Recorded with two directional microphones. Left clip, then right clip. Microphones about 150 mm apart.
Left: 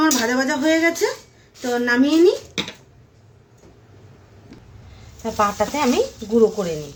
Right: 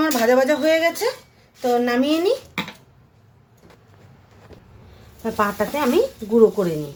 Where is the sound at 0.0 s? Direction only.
70° right (ahead or behind).